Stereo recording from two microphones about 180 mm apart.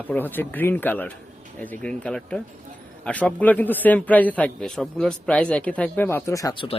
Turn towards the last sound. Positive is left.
turn(degrees=25)  # may be behind; listen again after turning